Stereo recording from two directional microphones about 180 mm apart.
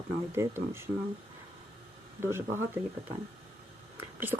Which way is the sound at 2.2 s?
15° right (ahead or behind).